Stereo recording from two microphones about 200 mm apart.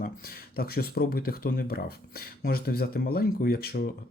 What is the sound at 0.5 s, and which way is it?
Speech, 50° left (ahead or behind).